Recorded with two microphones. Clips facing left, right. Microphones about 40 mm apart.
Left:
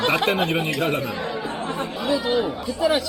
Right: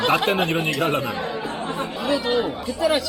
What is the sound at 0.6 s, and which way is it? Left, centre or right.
Speech, right.